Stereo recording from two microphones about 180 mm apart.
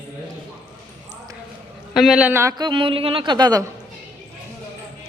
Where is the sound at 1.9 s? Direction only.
Centre (ahead or behind); by 3.7 s 20° right (ahead or behind).